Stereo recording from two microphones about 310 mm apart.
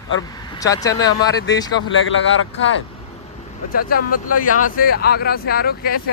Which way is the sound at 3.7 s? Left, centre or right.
Left.